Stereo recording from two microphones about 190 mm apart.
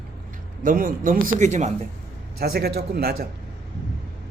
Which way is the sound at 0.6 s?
45° right (ahead or behind).